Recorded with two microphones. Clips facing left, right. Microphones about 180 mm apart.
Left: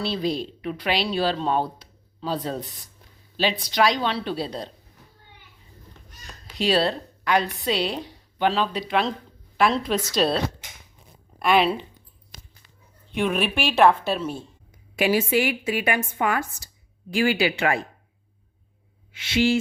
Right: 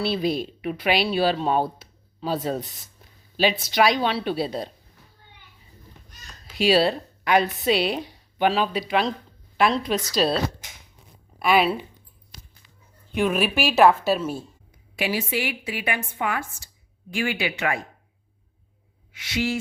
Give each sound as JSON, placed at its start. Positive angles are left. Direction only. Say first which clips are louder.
{"t": 0.0, "sound": "speech", "louder": "right 2 dB", "side_deg": -10}
{"t": 6.6, "sound": "a woman's voice", "louder": "right 2 dB", "side_deg": -5}
{"t": 13.1, "sound": "a woman's voice", "louder": "right 1 dB", "side_deg": 0}
{"t": 14.9, "sound": "a woman's voice", "louder": "left 5 dB", "side_deg": 50}
{"t": 19.1, "sound": "speech", "louder": "left 5 dB", "side_deg": 30}